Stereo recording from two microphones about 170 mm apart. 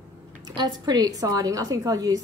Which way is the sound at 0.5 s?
25° right (ahead or behind).